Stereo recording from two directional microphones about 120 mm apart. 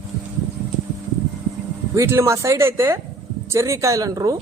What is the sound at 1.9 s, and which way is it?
Speech, 25° right (ahead or behind).